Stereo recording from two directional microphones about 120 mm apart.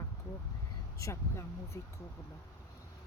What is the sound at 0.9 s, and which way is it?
Speech, 25° left (ahead or behind).